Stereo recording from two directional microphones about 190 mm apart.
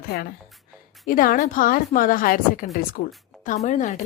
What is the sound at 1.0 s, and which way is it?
A woman's voice, 45° left (ahead or behind).